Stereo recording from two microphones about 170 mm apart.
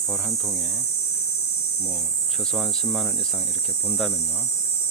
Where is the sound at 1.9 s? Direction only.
Centre (ahead or behind).